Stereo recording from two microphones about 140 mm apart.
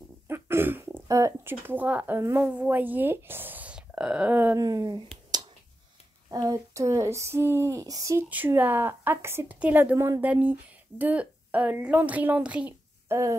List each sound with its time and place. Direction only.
0.3 s speech: 15° right (ahead or behind)
4.6 s speech: 25° right (ahead or behind)
6.3 s a sound: 25° right (ahead or behind)
13.1 s speech: 20° right (ahead or behind)